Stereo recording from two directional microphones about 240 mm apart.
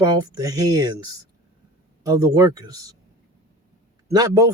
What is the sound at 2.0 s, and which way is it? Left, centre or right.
Speech, centre.